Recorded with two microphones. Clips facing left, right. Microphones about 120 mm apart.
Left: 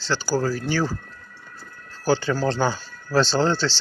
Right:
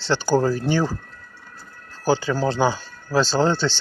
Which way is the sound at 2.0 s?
15° right (ahead or behind).